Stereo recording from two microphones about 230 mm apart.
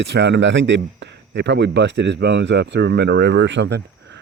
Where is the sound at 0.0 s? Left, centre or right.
Right.